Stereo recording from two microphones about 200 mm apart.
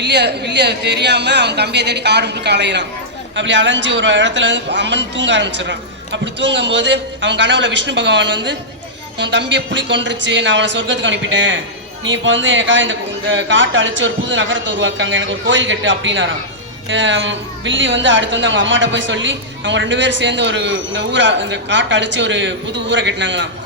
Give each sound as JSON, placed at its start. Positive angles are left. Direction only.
{"t": 0.0, "sound": "a woman's voice", "side_deg": -60}